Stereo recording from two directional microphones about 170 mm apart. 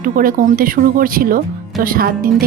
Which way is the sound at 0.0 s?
55° right (ahead or behind).